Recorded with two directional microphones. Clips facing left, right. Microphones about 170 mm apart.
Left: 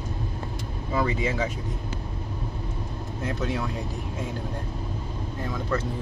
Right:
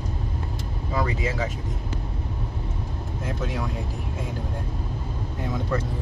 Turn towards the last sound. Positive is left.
turn(degrees=-15)  # may be behind; listen again after turning